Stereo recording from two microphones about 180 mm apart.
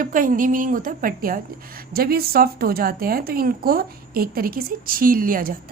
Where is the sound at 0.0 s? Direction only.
50° right (ahead or behind).